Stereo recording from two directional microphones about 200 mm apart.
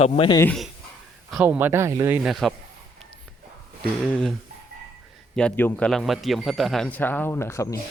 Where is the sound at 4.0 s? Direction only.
Centre (ahead or behind).